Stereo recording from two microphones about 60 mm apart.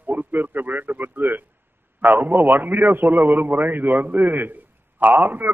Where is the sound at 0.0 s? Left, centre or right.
Right.